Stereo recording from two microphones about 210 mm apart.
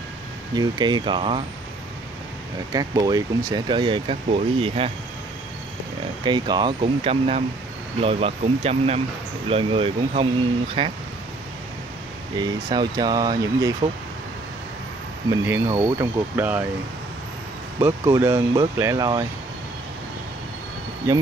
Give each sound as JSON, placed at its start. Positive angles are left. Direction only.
{"t": 0.6, "sound": "speech", "side_deg": -20}
{"t": 2.7, "sound": "speech", "side_deg": -15}
{"t": 6.2, "sound": "speech", "side_deg": -20}
{"t": 12.4, "sound": "speech", "side_deg": -20}
{"t": 15.2, "sound": "speech", "side_deg": -15}
{"t": 17.7, "sound": "speech", "side_deg": -10}